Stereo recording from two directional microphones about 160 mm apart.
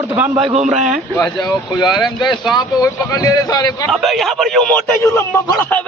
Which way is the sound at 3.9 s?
Centre (ahead or behind).